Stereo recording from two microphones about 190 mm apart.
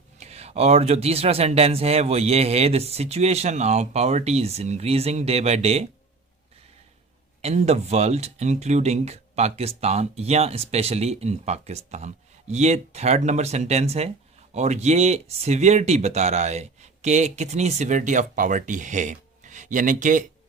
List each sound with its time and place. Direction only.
0.2 s speech: 35° right (ahead or behind)
7.4 s speech: 35° right (ahead or behind)